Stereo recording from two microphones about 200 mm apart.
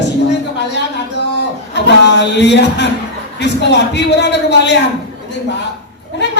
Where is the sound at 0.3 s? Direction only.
60° left (ahead or behind).